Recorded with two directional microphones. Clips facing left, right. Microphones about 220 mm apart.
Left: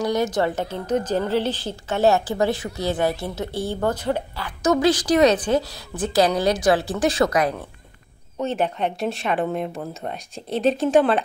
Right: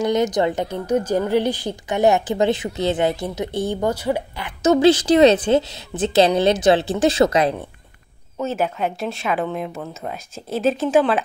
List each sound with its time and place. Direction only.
0.0 s a woman's voice: 20° right (ahead or behind)
4.6 s a woman's voice: 25° right (ahead or behind)
8.4 s speech: 5° right (ahead or behind)